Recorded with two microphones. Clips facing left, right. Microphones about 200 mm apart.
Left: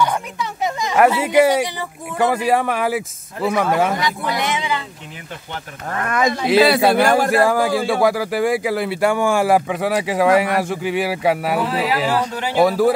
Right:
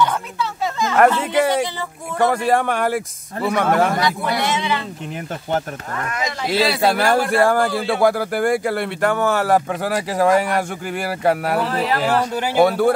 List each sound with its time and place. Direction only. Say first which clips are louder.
0.0 s speech: even; 15° left (ahead or behind)
4.0 s speech: right 1 dB; 15° left (ahead or behind)
6.0 s speech: left 7 dB; 55° left (ahead or behind)
7.0 s speech: left 2 dB; 5° left (ahead or behind)